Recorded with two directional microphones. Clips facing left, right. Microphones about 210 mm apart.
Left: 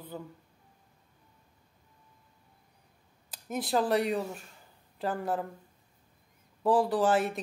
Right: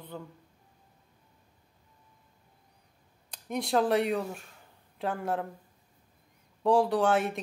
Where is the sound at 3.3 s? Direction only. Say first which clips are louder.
Right 2 dB; centre (ahead or behind).